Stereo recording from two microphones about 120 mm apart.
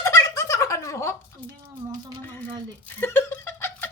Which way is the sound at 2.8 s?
15° left (ahead or behind).